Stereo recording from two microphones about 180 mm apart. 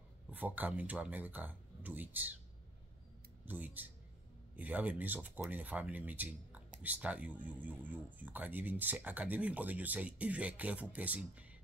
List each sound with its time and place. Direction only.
0.3 s speech: 10° right (ahead or behind)
3.4 s speech: 10° right (ahead or behind)